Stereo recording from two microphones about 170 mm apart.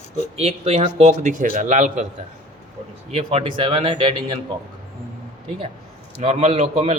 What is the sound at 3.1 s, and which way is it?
A man's voice, 35° right (ahead or behind).